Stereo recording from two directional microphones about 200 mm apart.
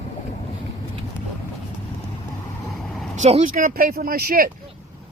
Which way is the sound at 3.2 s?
35° right (ahead or behind).